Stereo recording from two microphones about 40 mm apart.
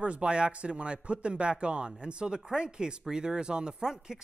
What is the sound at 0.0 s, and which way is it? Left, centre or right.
Speech, right.